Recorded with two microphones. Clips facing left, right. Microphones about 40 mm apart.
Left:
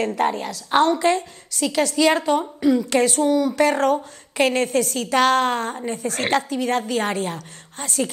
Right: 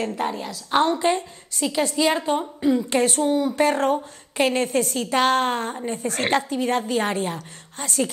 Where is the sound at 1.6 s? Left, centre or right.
Left.